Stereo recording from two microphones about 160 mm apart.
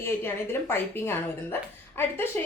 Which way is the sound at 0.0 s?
15° left (ahead or behind).